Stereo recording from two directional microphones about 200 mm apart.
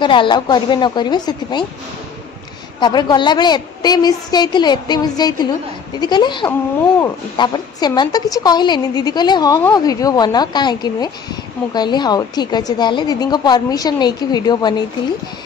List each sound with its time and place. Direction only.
0.0 s a woman's voice: 25° left (ahead or behind)
2.8 s a woman's voice: 20° left (ahead or behind)